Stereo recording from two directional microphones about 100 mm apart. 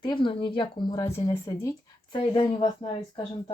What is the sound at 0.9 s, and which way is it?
Speech, 35° left (ahead or behind).